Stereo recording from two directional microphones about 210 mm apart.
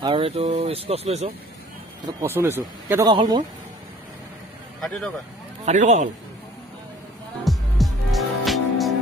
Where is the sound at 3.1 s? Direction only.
25° right (ahead or behind).